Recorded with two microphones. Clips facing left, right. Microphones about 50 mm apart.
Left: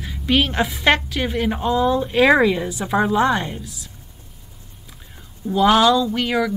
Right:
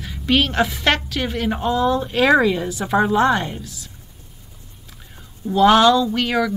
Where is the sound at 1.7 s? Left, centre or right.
Centre.